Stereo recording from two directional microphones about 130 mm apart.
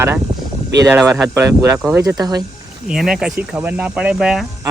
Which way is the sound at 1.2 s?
20° right (ahead or behind).